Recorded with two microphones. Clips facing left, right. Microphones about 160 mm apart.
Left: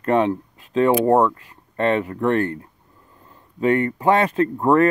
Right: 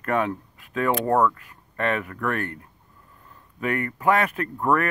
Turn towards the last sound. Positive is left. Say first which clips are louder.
# left 7 dB
turn(degrees=25)  # may be behind; listen again after turning